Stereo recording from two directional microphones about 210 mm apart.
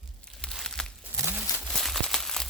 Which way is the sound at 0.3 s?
Centre (ahead or behind).